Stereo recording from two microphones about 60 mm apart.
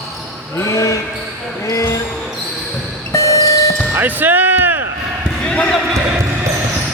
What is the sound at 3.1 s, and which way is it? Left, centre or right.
Music, left.